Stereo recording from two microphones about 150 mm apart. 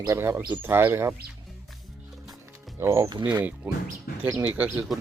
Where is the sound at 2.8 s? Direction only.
20° right (ahead or behind).